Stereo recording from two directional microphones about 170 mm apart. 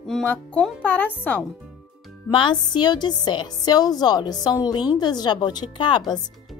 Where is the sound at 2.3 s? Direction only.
30° left (ahead or behind).